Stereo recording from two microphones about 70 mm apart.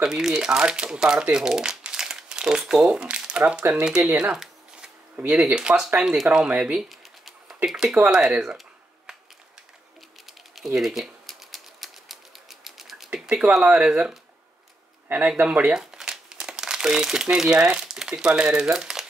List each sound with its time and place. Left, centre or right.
0.0 s speech: centre
4.2 s a sound: centre
5.3 s speech: centre
6.8 s typing: centre
8.1 s computer keyboard: centre
10.2 s typewriter: centre
13.5 s speech: centre
15.0 s speech: right
15.7 s crumpling: centre